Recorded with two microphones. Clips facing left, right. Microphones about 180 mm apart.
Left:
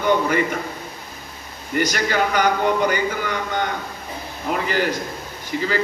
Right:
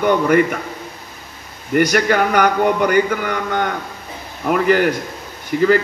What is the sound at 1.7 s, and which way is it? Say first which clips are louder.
A man's voice: right 6 dB; 55° right (ahead or behind).